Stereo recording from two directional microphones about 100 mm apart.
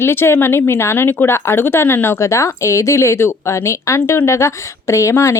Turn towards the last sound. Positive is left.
turn(degrees=30)  # may be behind; listen again after turning